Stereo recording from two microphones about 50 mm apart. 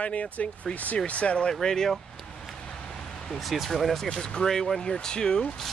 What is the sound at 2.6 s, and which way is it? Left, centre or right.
Vehicle, centre.